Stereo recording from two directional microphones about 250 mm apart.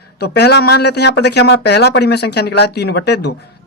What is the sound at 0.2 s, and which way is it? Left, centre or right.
Speech, left.